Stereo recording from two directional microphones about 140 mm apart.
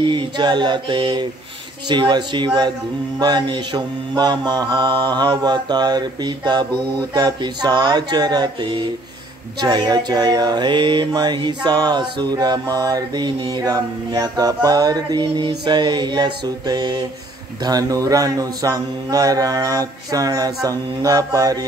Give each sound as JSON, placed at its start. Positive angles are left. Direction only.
{"t": 0.0, "sound": "mantra", "side_deg": -35}